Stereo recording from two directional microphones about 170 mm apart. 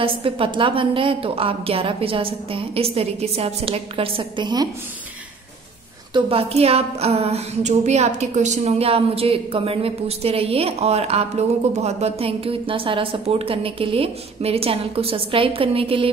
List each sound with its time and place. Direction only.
0.0 s a woman's voice: 30° right (ahead or behind)
6.1 s a woman's voice: 35° right (ahead or behind)